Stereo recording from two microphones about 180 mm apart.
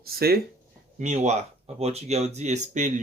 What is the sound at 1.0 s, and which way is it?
Speech, 40° right (ahead or behind).